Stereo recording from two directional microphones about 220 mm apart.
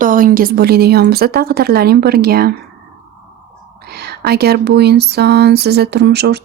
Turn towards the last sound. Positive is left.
turn(degrees=-50)  # may be behind; listen again after turning